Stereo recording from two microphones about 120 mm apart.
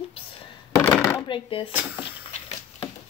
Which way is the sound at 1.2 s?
45° left (ahead or behind).